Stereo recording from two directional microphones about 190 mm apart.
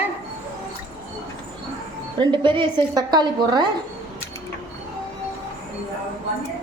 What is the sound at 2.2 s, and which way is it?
A woman's voice, 25° right (ahead or behind).